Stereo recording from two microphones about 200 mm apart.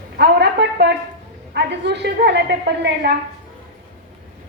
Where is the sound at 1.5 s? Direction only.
60° right (ahead or behind).